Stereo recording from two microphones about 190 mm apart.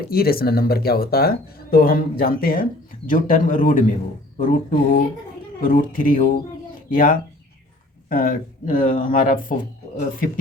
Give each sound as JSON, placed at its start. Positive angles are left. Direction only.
{"t": 0.1, "sound": "speech", "side_deg": 55}